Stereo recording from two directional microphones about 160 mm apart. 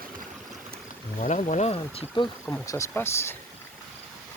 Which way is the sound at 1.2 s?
50° left (ahead or behind).